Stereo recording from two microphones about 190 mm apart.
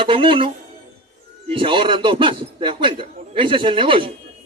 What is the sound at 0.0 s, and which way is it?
Speech, 25° right (ahead or behind).